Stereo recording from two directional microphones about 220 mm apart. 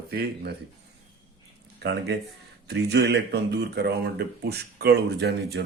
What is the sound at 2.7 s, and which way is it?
Speech, 50° right (ahead or behind).